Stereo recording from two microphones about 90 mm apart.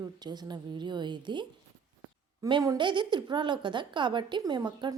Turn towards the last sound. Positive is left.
turn(degrees=-50)  # may be behind; listen again after turning